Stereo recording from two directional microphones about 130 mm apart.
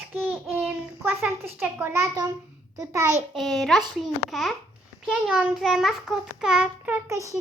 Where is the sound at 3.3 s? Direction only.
Centre (ahead or behind); by 7.3 s 20° right (ahead or behind).